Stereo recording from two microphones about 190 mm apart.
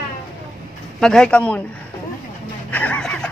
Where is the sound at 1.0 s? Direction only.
5° left (ahead or behind).